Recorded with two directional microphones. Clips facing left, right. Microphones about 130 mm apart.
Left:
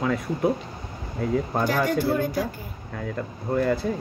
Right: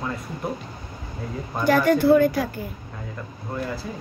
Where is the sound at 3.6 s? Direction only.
55° left (ahead or behind).